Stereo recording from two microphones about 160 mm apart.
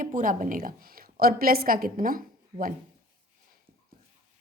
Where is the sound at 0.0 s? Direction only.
55° right (ahead or behind).